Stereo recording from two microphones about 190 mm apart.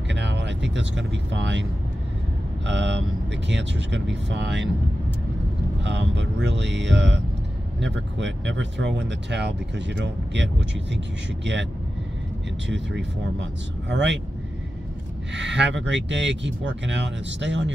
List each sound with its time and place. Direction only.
0.1 s speech: 65° right (ahead or behind)
5.9 s speech: 65° right (ahead or behind)
12.6 s speech: 70° right (ahead or behind)
15.3 s speech: 70° right (ahead or behind)